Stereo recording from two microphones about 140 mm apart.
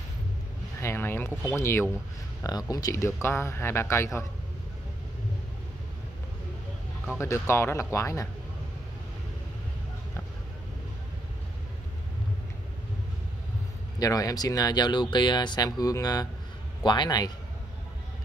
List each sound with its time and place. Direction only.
0.7 s a sound: 15° left (ahead or behind)
1.5 s speech: 20° left (ahead or behind)
7.2 s speech: 20° left (ahead or behind)
13.9 s a man's voice: 25° left (ahead or behind)